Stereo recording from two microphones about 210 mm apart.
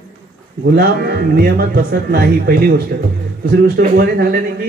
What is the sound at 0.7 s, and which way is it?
Speech, 50° right (ahead or behind).